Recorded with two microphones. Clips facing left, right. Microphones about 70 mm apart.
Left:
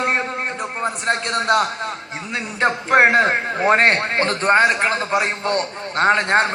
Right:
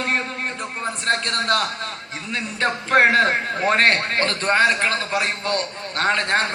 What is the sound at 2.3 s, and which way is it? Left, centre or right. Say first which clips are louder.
A man's voice: left 3 dB; left.